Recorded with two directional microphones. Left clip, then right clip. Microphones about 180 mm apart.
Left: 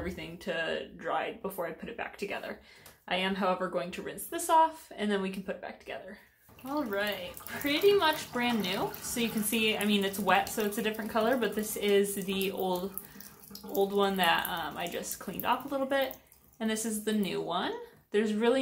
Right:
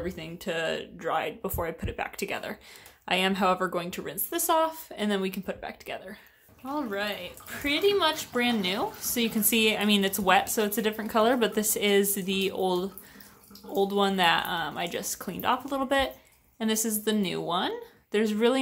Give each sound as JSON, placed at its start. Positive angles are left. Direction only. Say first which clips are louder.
{"t": 0.0, "sound": "speech", "louder": "right 3 dB", "side_deg": -40}